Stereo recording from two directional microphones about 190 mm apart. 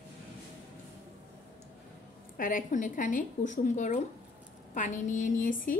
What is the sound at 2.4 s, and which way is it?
A woman's voice, 45° left (ahead or behind).